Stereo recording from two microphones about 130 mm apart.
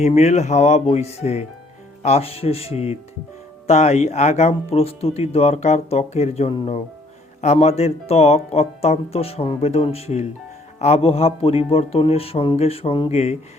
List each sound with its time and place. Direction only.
0.0 s speech: 60° left (ahead or behind)